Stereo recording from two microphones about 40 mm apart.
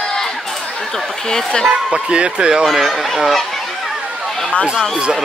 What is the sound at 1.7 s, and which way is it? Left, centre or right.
Speech, right.